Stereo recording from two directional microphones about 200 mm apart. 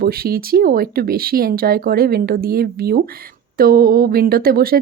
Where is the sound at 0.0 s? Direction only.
50° right (ahead or behind).